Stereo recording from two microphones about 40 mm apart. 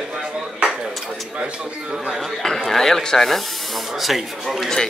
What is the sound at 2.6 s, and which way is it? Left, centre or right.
Speech, centre.